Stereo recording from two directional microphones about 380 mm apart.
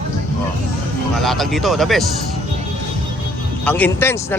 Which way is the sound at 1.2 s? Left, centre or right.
Centre.